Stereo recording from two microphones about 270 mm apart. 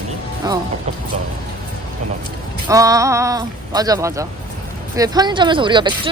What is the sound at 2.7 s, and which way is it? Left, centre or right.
Speech, centre.